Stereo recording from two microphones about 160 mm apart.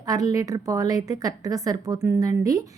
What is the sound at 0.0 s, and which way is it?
Speech, 25° right (ahead or behind).